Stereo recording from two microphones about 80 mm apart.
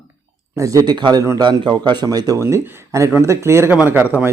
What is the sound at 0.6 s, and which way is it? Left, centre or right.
Speech, right.